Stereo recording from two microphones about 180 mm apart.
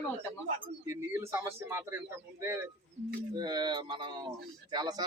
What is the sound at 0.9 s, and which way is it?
Speech, 15° right (ahead or behind).